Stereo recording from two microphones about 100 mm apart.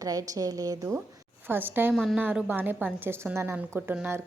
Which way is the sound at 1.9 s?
5° right (ahead or behind).